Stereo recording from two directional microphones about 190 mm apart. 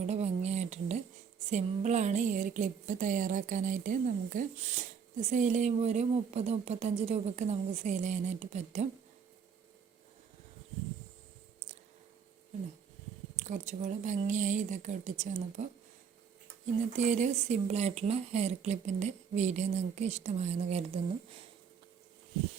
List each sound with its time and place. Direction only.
0.0 s a sound: 35° right (ahead or behind)
1.5 s speech: 40° right (ahead or behind)
13.4 s speech: 40° right (ahead or behind)
17.0 s speech: 40° right (ahead or behind)